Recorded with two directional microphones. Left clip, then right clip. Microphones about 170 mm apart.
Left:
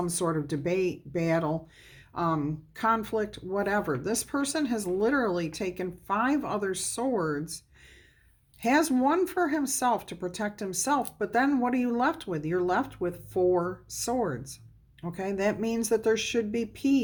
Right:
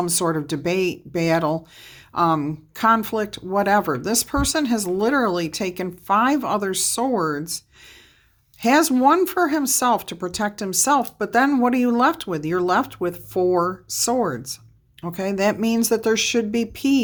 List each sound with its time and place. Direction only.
0.0 s speech: 35° right (ahead or behind)
8.6 s speech: 30° right (ahead or behind)